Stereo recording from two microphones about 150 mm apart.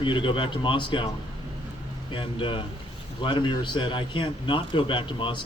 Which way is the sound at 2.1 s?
35° left (ahead or behind).